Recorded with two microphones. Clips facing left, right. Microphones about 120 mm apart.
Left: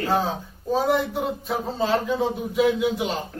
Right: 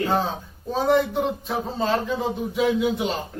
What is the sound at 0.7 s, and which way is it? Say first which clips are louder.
Speech: right 1 dB; 5° left (ahead or behind).